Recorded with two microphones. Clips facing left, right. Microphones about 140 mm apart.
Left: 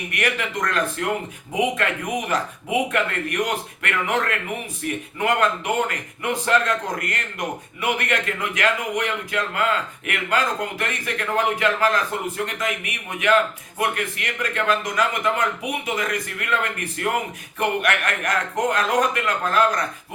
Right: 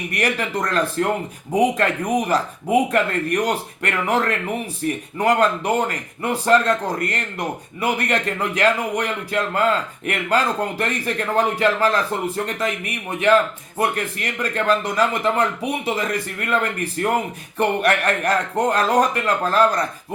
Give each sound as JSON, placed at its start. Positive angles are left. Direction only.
{"t": 0.1, "sound": "speech", "side_deg": -35}